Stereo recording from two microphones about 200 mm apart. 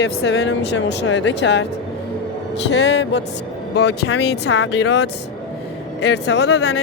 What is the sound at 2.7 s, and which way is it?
Speech, 60° left (ahead or behind).